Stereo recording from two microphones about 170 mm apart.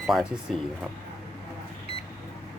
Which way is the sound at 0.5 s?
Centre (ahead or behind).